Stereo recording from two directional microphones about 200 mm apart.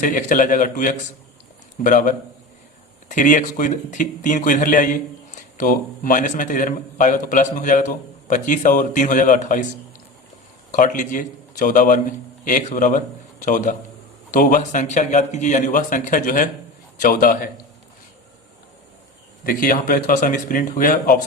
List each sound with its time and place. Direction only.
0.0 s a man's voice: 40° left (ahead or behind)
10.7 s a man's voice: 40° left (ahead or behind)
19.5 s a man's voice: 45° left (ahead or behind)